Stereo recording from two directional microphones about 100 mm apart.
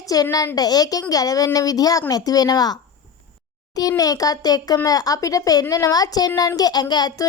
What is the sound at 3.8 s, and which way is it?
Speech, 35° left (ahead or behind).